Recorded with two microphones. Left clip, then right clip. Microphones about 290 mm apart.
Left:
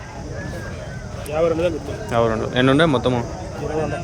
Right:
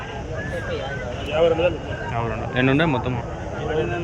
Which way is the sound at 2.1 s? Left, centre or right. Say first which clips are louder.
Left 9 dB; left.